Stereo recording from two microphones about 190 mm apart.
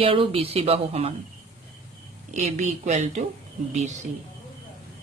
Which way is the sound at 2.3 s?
40° right (ahead or behind).